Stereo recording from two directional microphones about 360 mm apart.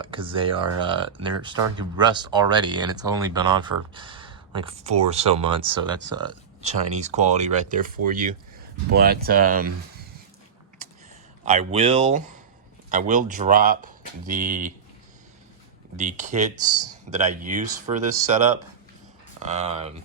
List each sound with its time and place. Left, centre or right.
0.0 s speech: centre
11.4 s speech: centre
16.0 s speech: centre